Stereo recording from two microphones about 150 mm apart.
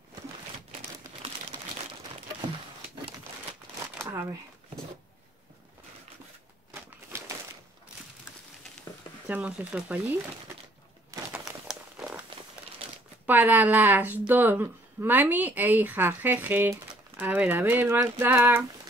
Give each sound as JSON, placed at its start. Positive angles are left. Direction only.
{"t": 4.0, "sound": "shuffling cards", "side_deg": -20}
{"t": 6.7, "sound": "a sound", "side_deg": -20}
{"t": 9.3, "sound": "speech", "side_deg": -10}
{"t": 11.3, "sound": "crumpling", "side_deg": -5}
{"t": 13.3, "sound": "speech", "side_deg": -10}